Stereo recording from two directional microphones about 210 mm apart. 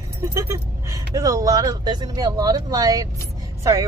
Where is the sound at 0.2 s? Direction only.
15° right (ahead or behind).